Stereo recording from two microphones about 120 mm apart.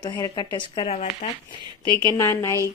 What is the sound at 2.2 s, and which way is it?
Speech, 25° left (ahead or behind).